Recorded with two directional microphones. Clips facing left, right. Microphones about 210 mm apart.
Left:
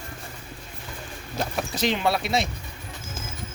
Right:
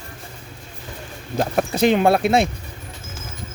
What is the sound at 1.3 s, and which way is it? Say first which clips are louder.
Speech: right 8 dB; 55° right (ahead or behind).